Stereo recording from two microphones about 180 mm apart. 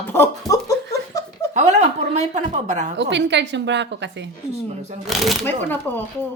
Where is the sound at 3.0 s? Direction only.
80° right.